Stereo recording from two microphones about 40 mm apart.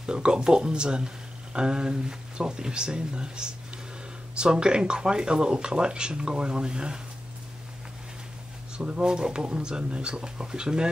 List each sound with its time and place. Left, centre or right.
0.0 s speech: centre
8.7 s speech: right